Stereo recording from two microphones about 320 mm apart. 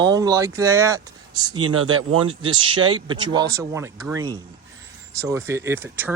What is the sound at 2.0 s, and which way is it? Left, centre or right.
Speech, right.